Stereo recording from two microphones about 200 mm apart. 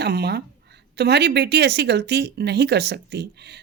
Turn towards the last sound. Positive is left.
turn(degrees=-55)  # may be behind; listen again after turning